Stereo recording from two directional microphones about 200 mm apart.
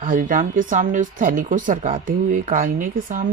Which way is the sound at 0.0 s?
40° right (ahead or behind).